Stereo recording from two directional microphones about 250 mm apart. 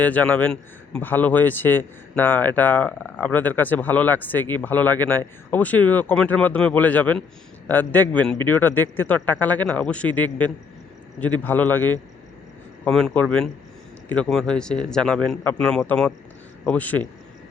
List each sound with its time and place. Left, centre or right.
0.0 s a man's voice: centre